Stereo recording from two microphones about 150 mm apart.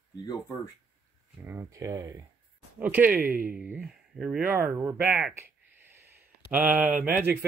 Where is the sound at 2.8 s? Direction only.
10° right (ahead or behind).